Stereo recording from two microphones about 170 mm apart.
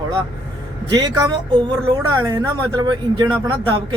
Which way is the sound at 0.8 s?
25° right (ahead or behind).